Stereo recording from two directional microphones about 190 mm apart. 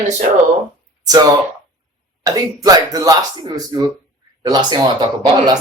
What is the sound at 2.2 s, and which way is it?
Speech, 20° right (ahead or behind).